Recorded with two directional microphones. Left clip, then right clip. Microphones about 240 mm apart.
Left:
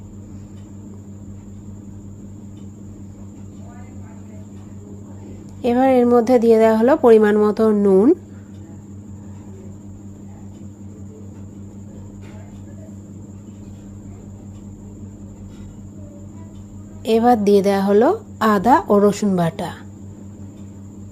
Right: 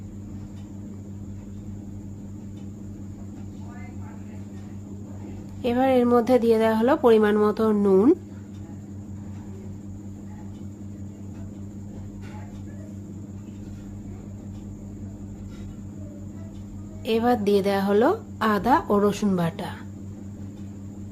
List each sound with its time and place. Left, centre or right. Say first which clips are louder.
5.6 s a woman's voice: left 6 dB; centre
17.1 s a woman's voice: left 7 dB; centre